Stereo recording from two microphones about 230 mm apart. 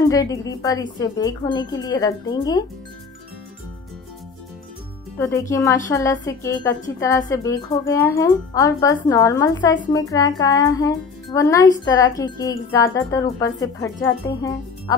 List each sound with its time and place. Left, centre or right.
0.1 s a woman's voice: centre
5.2 s a woman's voice: centre